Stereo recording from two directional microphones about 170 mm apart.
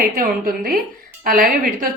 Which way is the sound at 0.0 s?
55° right (ahead or behind).